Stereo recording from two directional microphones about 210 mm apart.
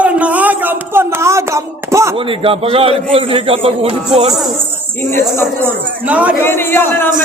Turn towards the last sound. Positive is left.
turn(degrees=10)  # may be behind; listen again after turning